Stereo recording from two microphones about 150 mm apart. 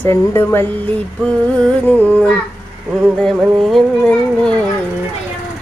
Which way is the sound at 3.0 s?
Centre (ahead or behind).